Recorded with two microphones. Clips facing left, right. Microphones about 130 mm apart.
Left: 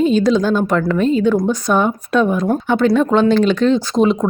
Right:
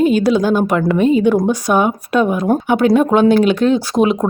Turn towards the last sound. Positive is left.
turn(degrees=-10)  # may be behind; listen again after turning